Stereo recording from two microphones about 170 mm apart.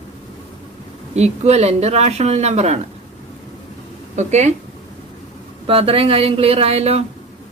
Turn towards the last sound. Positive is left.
turn(degrees=-35)  # may be behind; listen again after turning